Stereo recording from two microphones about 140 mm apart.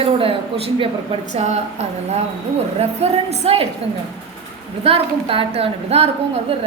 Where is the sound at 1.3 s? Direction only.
55° right (ahead or behind).